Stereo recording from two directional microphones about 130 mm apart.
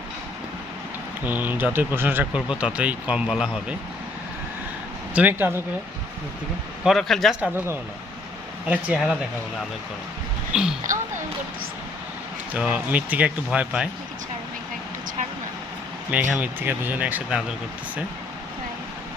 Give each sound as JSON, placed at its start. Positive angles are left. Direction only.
{"t": 1.2, "sound": "speech", "side_deg": -15}
{"t": 5.1, "sound": "speech", "side_deg": -15}
{"t": 6.8, "sound": "speech", "side_deg": 0}
{"t": 8.6, "sound": "speech", "side_deg": -10}
{"t": 10.5, "sound": "speech", "side_deg": -5}
{"t": 12.5, "sound": "speech", "side_deg": -10}
{"t": 16.1, "sound": "speech", "side_deg": -10}